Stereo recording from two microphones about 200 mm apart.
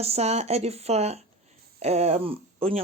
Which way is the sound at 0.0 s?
30° right (ahead or behind).